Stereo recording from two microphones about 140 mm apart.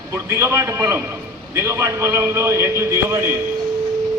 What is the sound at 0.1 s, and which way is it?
A man's voice, 20° right (ahead or behind).